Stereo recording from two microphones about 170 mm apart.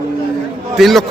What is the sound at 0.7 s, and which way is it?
Speech, centre (ahead or behind).